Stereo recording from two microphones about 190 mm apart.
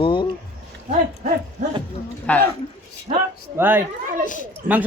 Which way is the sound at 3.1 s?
35° right (ahead or behind).